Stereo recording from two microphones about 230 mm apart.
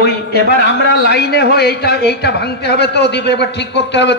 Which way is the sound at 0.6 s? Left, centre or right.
Left.